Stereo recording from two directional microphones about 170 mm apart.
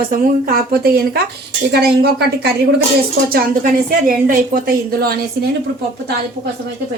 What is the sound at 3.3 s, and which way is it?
A woman's voice, 55° right (ahead or behind).